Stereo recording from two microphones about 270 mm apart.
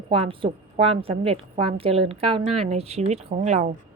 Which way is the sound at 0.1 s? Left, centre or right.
Centre.